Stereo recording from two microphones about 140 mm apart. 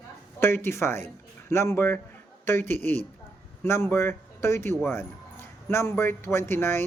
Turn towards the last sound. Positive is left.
turn(degrees=15)  # may be behind; listen again after turning